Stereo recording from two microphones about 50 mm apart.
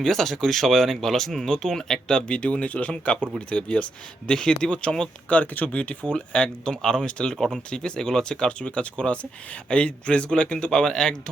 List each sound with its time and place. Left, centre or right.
0.0 s speech: centre
7.3 s speech: centre